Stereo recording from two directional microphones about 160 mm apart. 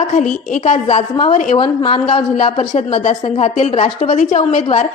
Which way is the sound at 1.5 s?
30° left (ahead or behind).